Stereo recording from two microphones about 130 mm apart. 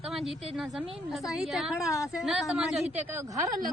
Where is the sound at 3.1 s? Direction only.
25° right (ahead or behind).